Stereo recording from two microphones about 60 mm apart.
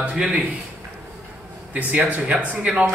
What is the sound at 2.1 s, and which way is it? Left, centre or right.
Speech, right.